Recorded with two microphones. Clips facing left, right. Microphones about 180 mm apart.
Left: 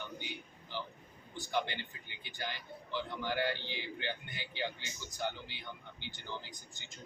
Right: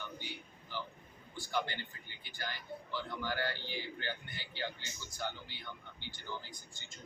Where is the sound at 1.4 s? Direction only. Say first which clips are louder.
Left 1 dB; 20° left (ahead or behind).